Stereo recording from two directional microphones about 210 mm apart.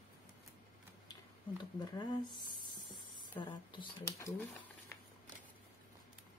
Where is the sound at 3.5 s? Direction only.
20° left (ahead or behind).